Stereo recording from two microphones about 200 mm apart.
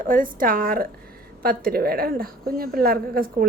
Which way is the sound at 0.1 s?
45° right (ahead or behind).